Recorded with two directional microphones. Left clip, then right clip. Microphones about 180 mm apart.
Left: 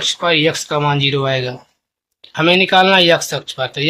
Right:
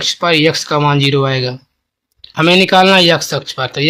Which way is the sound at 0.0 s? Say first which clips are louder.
Right 2 dB; 35° right (ahead or behind).